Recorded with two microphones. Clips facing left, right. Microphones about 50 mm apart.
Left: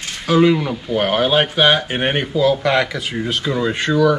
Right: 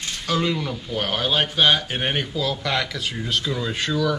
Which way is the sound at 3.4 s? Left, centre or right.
Left.